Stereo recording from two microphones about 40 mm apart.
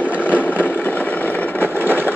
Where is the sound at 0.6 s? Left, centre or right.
Left.